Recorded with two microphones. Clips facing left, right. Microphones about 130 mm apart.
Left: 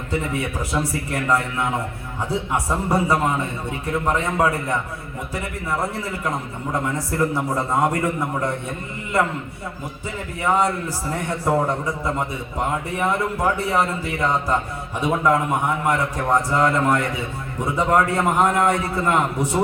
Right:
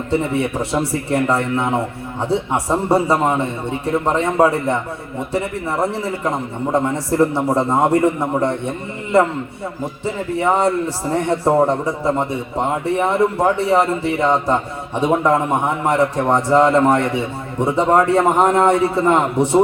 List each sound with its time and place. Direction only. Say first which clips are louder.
0.1 s a man's voice: right 6 dB; 30° right (ahead or behind)
10.3 s a man's voice: right 3 dB; 30° right (ahead or behind)